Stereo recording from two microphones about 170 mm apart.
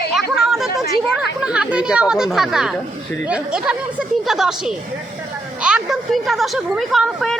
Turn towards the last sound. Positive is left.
turn(degrees=0)  # may be behind; listen again after turning